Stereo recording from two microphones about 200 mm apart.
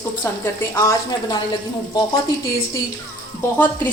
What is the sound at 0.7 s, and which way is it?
Speech, 20° left (ahead or behind).